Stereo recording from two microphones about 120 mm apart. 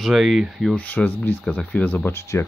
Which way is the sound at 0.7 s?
15° left (ahead or behind).